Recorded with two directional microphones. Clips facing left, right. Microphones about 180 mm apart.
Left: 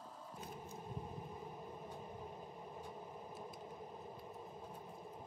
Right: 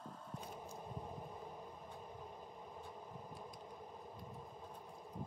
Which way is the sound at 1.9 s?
5° left (ahead or behind).